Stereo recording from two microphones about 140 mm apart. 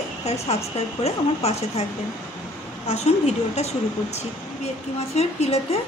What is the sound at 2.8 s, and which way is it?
Speech, 50° left (ahead or behind).